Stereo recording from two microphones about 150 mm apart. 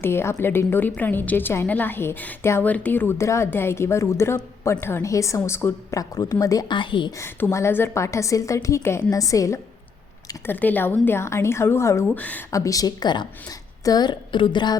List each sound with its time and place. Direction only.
0.0 s a woman's voice: 15° left (ahead or behind); by 7.1 s 30° left (ahead or behind)
7.2 s a woman's voice: 20° left (ahead or behind)
12.5 s a woman's voice: 20° left (ahead or behind)